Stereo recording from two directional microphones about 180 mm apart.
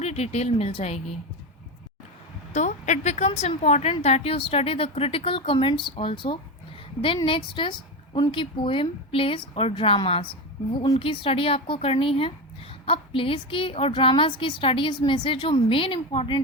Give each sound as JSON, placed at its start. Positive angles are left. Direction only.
{"t": 0.0, "sound": "a woman's voice", "side_deg": 35}
{"t": 2.5, "sound": "a woman's voice", "side_deg": 40}